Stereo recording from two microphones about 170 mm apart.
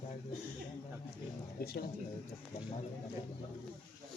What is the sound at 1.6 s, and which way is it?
Speech, 65° left (ahead or behind).